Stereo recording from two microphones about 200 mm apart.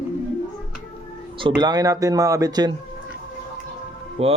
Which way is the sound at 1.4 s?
25° right (ahead or behind).